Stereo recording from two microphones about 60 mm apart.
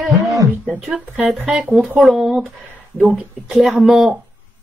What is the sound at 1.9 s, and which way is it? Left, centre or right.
Speech, centre.